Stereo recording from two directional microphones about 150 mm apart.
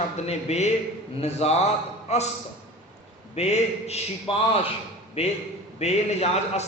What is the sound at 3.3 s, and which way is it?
A man's voice, 45° left (ahead or behind).